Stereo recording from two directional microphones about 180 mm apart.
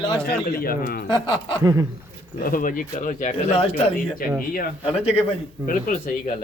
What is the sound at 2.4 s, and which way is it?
Speech, 50° left (ahead or behind).